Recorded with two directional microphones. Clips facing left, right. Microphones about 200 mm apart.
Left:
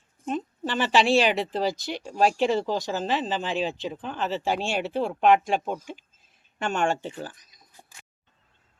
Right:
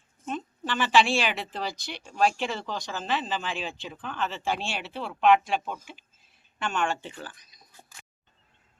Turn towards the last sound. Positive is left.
turn(degrees=45)  # may be behind; listen again after turning